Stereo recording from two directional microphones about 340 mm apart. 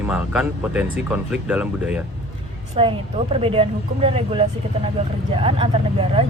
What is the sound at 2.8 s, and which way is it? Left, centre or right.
Speech, centre.